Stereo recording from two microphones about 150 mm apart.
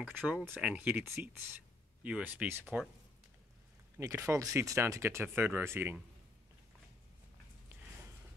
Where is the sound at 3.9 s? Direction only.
20° right (ahead or behind).